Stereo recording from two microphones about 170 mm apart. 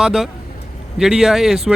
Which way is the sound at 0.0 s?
Centre (ahead or behind).